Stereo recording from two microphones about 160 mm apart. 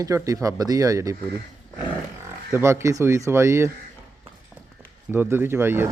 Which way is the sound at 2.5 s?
15° right (ahead or behind).